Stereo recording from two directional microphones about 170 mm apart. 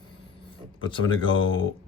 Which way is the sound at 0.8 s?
30° left (ahead or behind).